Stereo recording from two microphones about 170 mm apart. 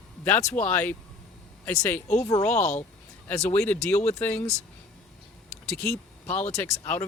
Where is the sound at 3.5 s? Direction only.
10° left (ahead or behind).